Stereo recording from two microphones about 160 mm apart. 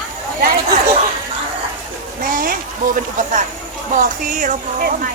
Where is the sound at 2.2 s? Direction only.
60° right (ahead or behind).